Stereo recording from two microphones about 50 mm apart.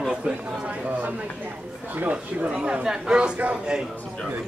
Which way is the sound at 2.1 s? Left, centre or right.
Centre.